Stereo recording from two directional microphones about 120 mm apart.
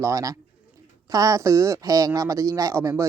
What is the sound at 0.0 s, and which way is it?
Speech, 30° right (ahead or behind).